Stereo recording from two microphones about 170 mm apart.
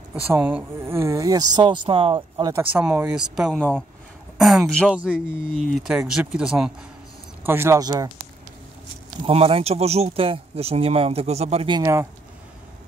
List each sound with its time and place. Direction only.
0.1 s speech: 10° right (ahead or behind)
2.6 s speech: 10° right (ahead or behind)
5.1 s speech: 70° right (ahead or behind)
5.8 s speech: 5° right (ahead or behind)
7.4 s speech: 15° right (ahead or behind)
9.2 s speech: 35° right (ahead or behind)